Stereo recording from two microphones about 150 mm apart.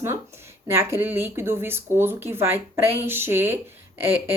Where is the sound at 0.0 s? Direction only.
15° right (ahead or behind).